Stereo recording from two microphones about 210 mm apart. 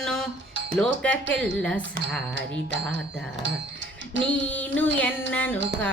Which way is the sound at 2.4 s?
55° right (ahead or behind).